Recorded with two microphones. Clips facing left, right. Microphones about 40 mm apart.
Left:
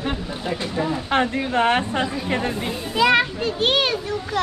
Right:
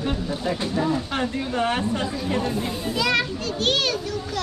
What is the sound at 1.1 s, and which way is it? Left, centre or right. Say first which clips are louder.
Speech: left 5 dB; left.